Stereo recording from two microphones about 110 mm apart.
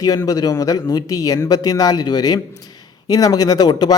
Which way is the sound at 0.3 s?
35° left (ahead or behind).